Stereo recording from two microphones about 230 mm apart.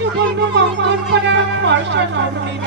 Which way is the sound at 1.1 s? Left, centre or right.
Right.